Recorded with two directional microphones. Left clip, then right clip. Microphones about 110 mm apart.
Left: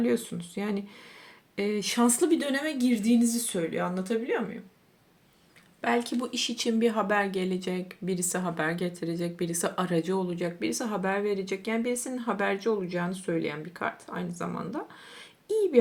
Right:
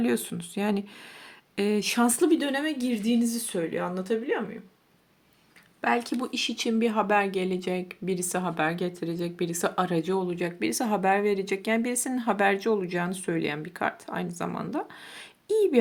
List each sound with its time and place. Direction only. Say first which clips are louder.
0.0 s speech: even; 50° right (ahead or behind); by 4.4 s 30° right (ahead or behind)
5.8 s speech: right 1 dB; 40° right (ahead or behind); by 15.8 s 55° right (ahead or behind)